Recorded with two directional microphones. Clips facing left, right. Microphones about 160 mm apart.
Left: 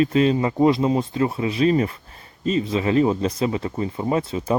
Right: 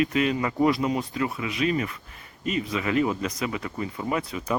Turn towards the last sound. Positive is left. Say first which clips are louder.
# left 6 dB
turn(degrees=30)  # may be behind; listen again after turning